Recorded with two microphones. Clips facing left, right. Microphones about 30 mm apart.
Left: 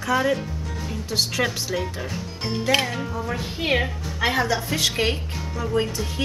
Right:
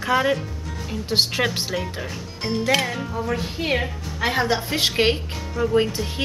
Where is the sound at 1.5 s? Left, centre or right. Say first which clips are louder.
Right 1 dB; right.